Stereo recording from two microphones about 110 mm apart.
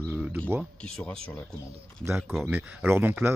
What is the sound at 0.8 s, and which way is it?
Speech, 5° left (ahead or behind).